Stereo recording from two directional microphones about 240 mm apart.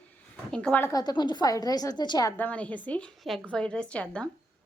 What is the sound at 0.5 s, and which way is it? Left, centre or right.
A woman's voice, centre.